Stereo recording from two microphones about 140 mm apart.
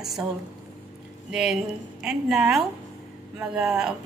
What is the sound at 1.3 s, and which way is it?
A woman's voice, 5° right (ahead or behind).